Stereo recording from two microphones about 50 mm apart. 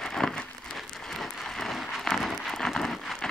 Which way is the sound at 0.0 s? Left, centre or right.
Centre.